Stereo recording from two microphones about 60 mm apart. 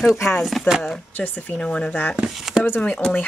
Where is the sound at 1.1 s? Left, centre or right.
Left.